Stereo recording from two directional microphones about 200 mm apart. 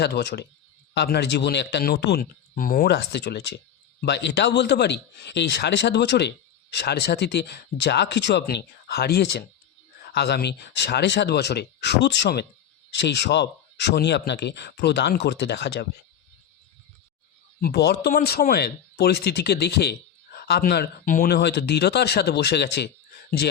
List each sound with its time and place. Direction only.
0.0 s speech: 55° left (ahead or behind)
17.6 s speech: 55° left (ahead or behind)
21.3 s speech: 55° left (ahead or behind)